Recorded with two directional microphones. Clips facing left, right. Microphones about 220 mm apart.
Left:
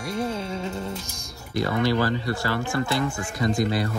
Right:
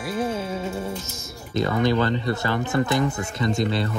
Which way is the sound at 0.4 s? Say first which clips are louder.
Right 2 dB; 5° right (ahead or behind).